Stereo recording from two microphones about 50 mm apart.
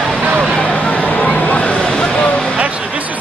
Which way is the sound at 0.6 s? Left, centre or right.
Left.